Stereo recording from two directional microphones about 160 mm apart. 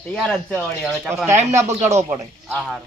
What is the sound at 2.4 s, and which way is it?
Speech, centre (ahead or behind).